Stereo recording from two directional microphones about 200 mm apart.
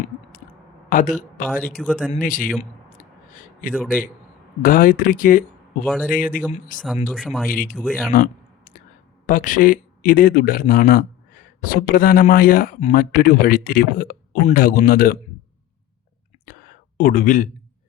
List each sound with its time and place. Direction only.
0.9 s a man's voice: 40° left (ahead or behind)
1.5 s speech: 5° left (ahead or behind)
2.1 s speech: 40° left (ahead or behind)
4.6 s speech: 45° left (ahead or behind)
5.8 s speech: 5° left (ahead or behind)
6.1 s speech: 40° left (ahead or behind)
6.7 s speech: centre (ahead or behind)
8.1 s a sound: 45° left (ahead or behind)
9.2 s speech: 40° left (ahead or behind)
16.5 s a sound: 45° left (ahead or behind)